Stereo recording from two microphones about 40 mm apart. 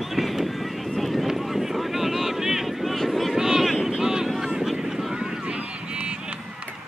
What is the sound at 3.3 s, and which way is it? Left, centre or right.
Vehicle, centre.